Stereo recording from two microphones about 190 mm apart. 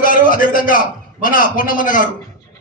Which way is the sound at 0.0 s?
45° left (ahead or behind).